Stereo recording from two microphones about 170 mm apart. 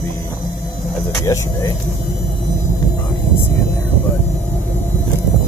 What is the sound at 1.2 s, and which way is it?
Speech, 20° left (ahead or behind).